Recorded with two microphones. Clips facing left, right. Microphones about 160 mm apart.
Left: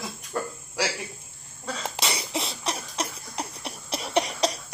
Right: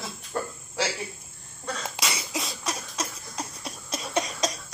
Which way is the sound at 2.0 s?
25° left (ahead or behind).